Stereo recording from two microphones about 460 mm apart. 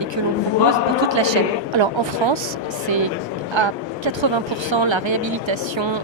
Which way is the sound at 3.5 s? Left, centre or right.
Right.